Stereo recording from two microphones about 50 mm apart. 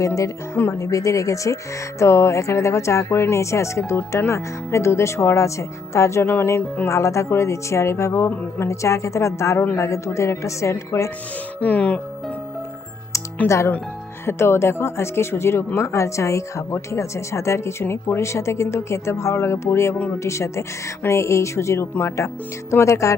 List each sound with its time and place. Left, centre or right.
0.0 s a woman's voice: left
2.0 s speech: left
6.2 s speech: left
6.8 s speech: left
8.5 s a woman's voice: left
11.6 s speech: left
13.4 s speech: left
14.3 s a woman's voice: left